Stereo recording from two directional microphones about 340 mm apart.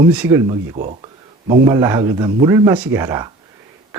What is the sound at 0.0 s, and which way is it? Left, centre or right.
Speech, centre.